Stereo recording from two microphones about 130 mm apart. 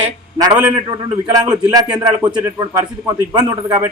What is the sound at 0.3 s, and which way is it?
A man's voice, 30° right (ahead or behind).